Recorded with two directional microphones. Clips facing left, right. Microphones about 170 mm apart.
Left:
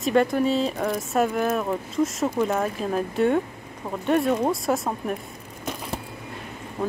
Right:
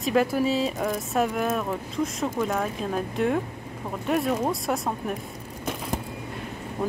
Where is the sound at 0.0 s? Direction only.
5° right (ahead or behind).